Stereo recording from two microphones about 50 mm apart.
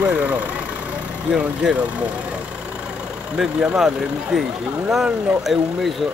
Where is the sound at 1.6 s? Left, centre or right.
Right.